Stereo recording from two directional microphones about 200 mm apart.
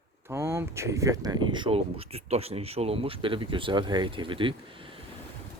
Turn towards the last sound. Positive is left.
turn(degrees=-25)  # may be behind; listen again after turning